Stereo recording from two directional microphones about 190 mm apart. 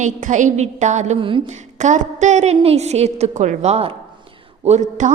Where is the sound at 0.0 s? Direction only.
40° right (ahead or behind).